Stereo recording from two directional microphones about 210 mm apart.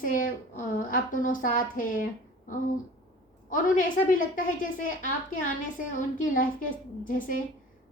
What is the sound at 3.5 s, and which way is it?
A woman's voice, 40° left (ahead or behind).